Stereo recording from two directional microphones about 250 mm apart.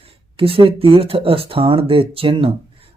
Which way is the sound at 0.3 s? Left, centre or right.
Right.